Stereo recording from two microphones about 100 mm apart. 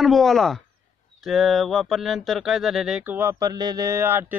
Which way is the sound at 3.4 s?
40° right (ahead or behind).